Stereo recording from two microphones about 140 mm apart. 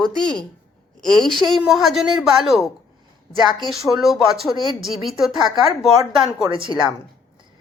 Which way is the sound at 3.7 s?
Centre (ahead or behind).